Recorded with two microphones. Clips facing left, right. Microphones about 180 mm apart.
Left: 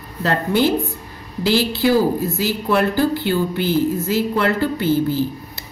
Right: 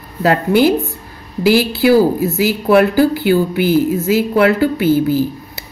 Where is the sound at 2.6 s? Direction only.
65° right (ahead or behind).